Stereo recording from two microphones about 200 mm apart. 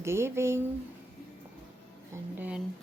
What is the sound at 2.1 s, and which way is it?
Speech, 5° right (ahead or behind).